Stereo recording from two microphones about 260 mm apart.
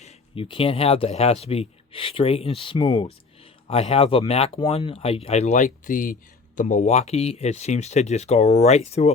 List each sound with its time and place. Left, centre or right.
0.0 s speech: left